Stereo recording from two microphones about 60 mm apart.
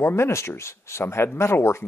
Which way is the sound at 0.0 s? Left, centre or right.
Left.